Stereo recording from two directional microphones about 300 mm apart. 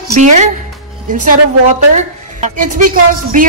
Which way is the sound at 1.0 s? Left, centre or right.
Right.